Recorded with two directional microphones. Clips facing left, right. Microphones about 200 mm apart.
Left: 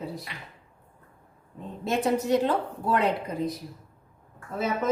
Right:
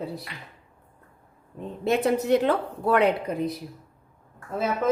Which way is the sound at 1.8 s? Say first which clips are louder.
Right 3 dB; 60° right (ahead or behind).